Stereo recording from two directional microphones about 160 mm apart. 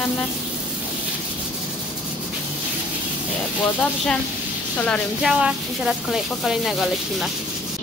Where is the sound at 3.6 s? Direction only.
10° left (ahead or behind).